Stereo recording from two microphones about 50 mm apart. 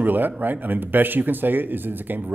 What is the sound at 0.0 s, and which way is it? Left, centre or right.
Speech, right.